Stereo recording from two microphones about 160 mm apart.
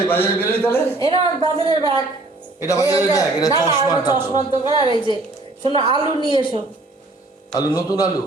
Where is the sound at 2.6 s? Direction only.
20° left (ahead or behind).